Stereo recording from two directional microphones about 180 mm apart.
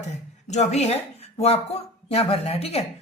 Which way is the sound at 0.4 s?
40° left (ahead or behind).